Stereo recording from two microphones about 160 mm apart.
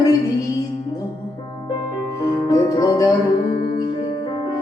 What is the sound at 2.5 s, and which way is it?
Music, 25° left (ahead or behind).